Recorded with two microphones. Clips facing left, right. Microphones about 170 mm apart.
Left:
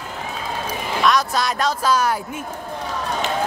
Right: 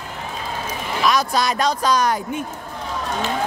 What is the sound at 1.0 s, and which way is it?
A man's voice, centre (ahead or behind).